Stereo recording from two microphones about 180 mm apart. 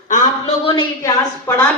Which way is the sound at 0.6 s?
25° left (ahead or behind).